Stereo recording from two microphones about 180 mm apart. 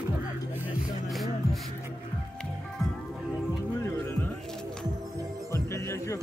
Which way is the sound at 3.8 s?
15° left (ahead or behind).